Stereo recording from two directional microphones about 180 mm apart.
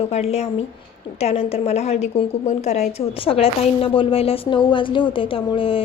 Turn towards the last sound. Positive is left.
turn(degrees=30)  # may be behind; listen again after turning